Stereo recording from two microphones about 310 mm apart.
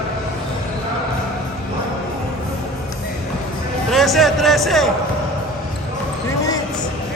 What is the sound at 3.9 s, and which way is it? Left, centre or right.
Speech, centre.